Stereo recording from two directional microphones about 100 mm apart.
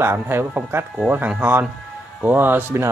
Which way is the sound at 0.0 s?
25° right (ahead or behind).